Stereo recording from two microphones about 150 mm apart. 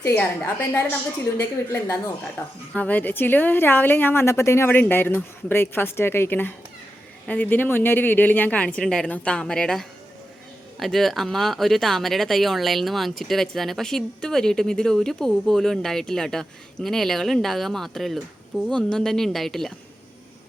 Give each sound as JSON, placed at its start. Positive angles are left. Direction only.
{"t": 0.0, "sound": "a woman's voice", "side_deg": 15}